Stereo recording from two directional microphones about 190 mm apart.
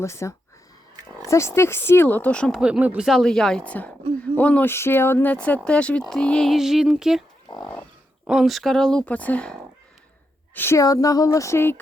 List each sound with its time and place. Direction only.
0.0 s speech: 15° left (ahead or behind)